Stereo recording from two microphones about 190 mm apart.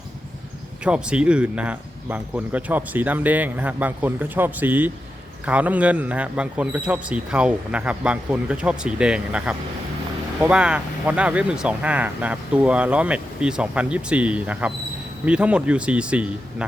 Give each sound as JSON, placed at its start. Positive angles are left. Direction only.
{"t": 0.9, "sound": "speech", "side_deg": -5}